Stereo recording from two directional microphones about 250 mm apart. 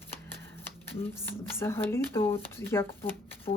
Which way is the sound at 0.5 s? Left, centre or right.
Centre.